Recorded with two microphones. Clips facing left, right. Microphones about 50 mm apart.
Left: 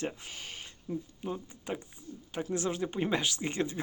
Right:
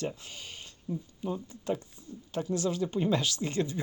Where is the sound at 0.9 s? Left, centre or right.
Centre.